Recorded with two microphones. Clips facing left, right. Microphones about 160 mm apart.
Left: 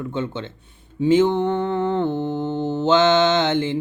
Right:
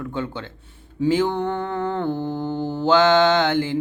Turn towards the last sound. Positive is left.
turn(degrees=20)  # may be behind; listen again after turning